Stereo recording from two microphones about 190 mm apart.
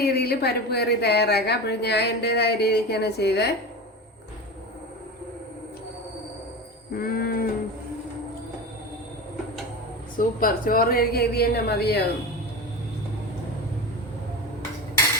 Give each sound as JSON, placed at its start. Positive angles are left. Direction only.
{"t": 0.0, "sound": "a woman's voice", "side_deg": 55}
{"t": 6.9, "sound": "wild animals", "side_deg": 50}
{"t": 10.2, "sound": "a woman's voice", "side_deg": 50}